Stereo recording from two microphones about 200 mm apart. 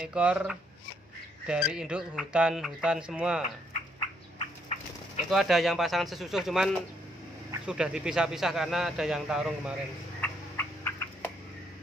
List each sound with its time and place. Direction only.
0.0 s speech: 5° right (ahead or behind)
4.4 s a sound: 35° left (ahead or behind)
5.3 s speech: centre (ahead or behind)
10.2 s frog: 10° left (ahead or behind)